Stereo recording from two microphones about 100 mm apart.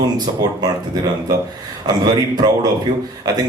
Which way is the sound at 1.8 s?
40° right (ahead or behind).